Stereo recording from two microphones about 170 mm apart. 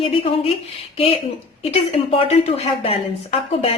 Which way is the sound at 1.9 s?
35° left (ahead or behind).